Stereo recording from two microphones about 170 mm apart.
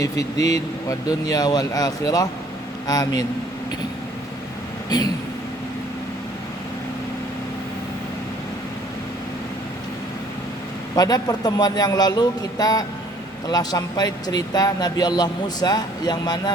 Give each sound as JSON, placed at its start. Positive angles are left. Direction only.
{"t": 0.0, "sound": "speech", "side_deg": 20}
{"t": 10.9, "sound": "speech", "side_deg": 20}